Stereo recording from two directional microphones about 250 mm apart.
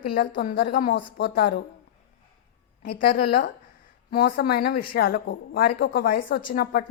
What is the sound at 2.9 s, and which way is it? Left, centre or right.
Speech, left.